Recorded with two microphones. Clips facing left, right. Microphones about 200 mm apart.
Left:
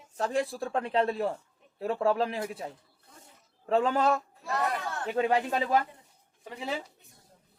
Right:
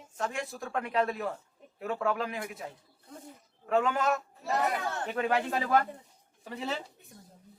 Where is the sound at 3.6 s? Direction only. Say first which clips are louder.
Left 2 dB; 30° left (ahead or behind).